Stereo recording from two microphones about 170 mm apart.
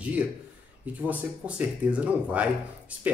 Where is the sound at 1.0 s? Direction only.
10° right (ahead or behind).